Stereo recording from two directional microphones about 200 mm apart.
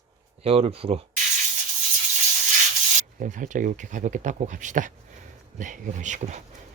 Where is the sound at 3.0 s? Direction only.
40° right (ahead or behind).